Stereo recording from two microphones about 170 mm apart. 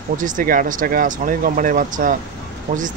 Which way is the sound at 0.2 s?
50° right (ahead or behind).